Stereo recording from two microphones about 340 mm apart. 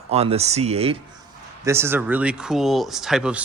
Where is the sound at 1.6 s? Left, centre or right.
Centre.